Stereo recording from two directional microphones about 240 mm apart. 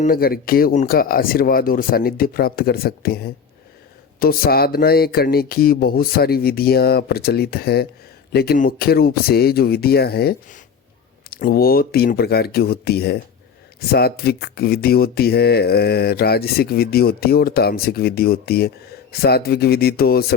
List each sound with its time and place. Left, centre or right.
0.0 s speech: left